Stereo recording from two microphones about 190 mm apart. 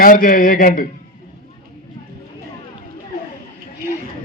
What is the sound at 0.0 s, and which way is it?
Speech, 45° left (ahead or behind).